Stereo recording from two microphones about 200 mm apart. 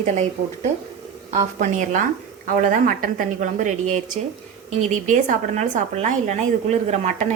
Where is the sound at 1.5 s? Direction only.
35° right (ahead or behind).